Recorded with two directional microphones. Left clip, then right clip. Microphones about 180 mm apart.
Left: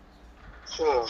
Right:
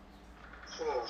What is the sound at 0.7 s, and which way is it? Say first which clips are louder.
Speech: left 11 dB; 75° left (ahead or behind).